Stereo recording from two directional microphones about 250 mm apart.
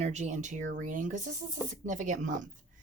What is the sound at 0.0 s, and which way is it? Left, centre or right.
Speech, right.